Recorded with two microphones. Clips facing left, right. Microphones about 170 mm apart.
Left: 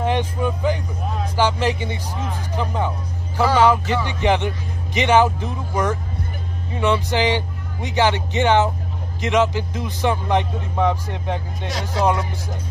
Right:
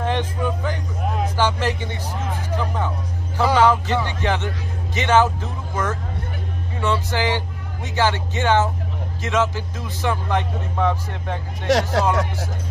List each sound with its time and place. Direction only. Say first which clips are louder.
0.0 s speech: left 2 dB; 15° left (ahead or behind)
11.6 s speech: right 3 dB; 85° right